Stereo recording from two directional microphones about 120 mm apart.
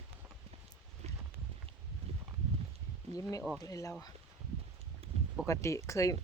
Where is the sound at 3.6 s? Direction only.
30° left (ahead or behind).